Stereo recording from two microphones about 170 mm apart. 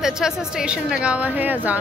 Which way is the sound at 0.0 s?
5° right (ahead or behind).